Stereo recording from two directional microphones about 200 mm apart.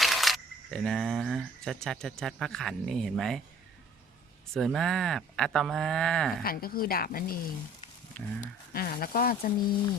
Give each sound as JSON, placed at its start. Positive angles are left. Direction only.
{"t": 0.0, "sound": "speech", "side_deg": 0}
{"t": 4.5, "sound": "speech", "side_deg": 0}
{"t": 6.4, "sound": "a woman's voice", "side_deg": 50}
{"t": 8.1, "sound": "speech", "side_deg": 5}
{"t": 8.7, "sound": "a woman's voice", "side_deg": 45}